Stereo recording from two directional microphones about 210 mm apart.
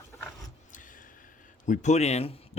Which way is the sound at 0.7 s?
40° left (ahead or behind).